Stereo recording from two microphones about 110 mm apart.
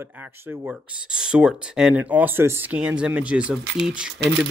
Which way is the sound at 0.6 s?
10° right (ahead or behind).